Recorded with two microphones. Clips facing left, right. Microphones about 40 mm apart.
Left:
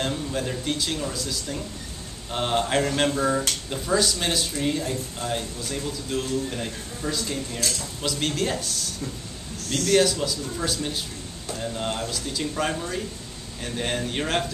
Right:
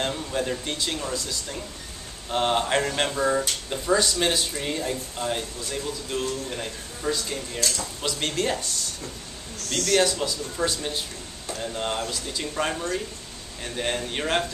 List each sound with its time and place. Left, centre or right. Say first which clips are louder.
0.0 s speech: even; centre